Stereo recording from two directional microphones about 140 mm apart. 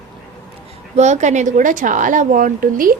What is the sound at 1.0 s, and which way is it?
A woman's voice, 55° right (ahead or behind).